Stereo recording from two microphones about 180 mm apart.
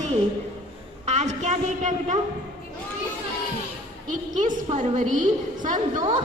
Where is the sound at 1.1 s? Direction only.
40° right (ahead or behind).